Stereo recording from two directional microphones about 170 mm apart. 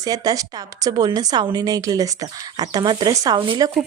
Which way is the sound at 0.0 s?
20° right (ahead or behind).